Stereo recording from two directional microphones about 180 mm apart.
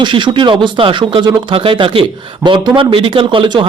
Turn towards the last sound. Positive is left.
turn(degrees=-30)  # may be behind; listen again after turning